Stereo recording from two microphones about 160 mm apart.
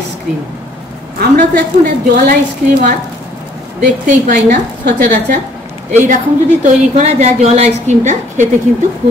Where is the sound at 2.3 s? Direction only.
60° right (ahead or behind).